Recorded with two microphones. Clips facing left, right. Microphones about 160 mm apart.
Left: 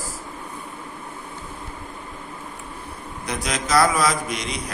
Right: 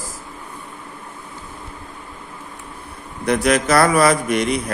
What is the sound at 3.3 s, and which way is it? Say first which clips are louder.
Speech: right 8 dB; 60° right (ahead or behind).